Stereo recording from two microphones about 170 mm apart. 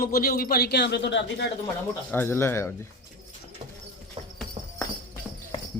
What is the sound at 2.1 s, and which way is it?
Speech, 15° left (ahead or behind).